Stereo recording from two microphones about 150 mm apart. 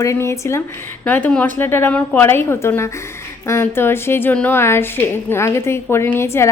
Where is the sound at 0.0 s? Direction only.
20° left (ahead or behind).